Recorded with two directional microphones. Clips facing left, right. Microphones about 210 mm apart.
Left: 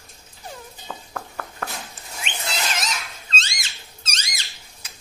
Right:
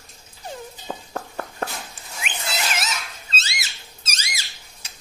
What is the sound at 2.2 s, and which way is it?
Squeak, 5° right (ahead or behind).